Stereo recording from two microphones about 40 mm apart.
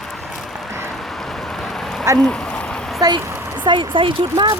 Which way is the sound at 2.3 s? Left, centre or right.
Left.